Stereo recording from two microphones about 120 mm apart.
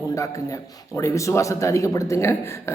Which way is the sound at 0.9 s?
25° left (ahead or behind).